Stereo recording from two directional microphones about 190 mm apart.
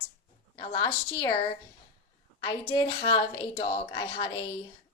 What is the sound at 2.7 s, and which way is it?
A woman's voice, 25° left (ahead or behind).